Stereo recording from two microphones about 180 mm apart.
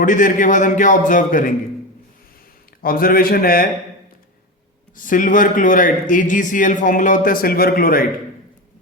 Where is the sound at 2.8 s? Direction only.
55° left (ahead or behind).